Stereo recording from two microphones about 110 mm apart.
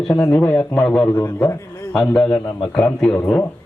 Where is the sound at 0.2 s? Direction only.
10° left (ahead or behind).